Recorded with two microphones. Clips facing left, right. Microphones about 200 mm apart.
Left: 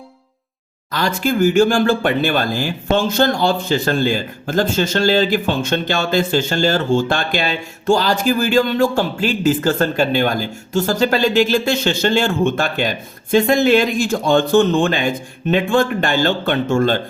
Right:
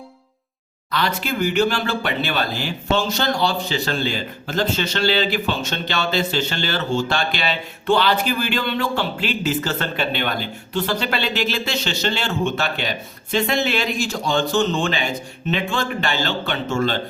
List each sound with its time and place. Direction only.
0.9 s speech: 45° left (ahead or behind)